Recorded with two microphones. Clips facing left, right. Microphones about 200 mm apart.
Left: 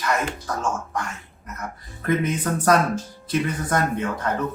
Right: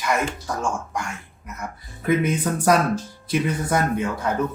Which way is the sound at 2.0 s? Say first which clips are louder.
Right 2 dB; 10° right (ahead or behind).